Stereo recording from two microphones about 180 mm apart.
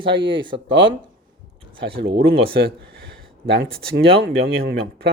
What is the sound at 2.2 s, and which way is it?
Speech, 55° right (ahead or behind).